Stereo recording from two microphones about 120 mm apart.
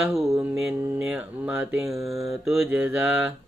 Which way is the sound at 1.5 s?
15° right (ahead or behind).